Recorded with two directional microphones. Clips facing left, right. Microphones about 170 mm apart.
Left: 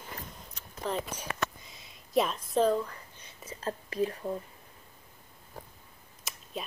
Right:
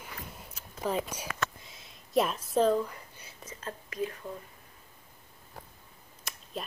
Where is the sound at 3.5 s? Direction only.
35° left (ahead or behind).